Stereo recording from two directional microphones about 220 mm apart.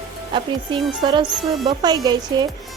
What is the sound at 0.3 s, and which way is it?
Speech, 20° right (ahead or behind).